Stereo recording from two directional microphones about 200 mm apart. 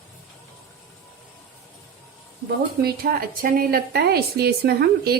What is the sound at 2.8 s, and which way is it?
A woman's voice, 50° right (ahead or behind).